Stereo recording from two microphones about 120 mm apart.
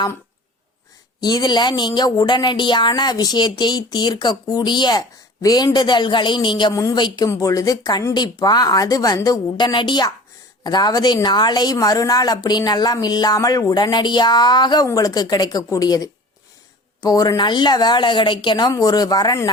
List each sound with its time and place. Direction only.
1.2 s speech: 35° left (ahead or behind)